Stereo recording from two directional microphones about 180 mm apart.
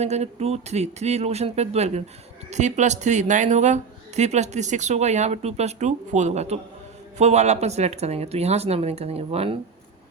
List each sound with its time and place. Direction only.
0.0 s speech: 35° right (ahead or behind)